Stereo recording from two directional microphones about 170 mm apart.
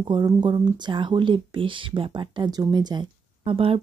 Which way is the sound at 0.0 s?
25° right (ahead or behind).